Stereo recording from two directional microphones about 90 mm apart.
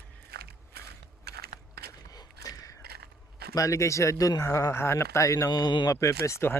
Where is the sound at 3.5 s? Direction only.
40° left (ahead or behind).